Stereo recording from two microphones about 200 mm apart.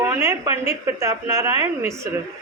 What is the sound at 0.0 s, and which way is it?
A woman's voice, 15° right (ahead or behind).